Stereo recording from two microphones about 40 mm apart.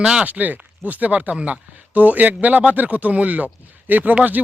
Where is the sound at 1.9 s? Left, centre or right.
Right.